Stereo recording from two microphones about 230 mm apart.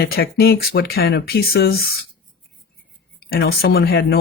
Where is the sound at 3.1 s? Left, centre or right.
Left.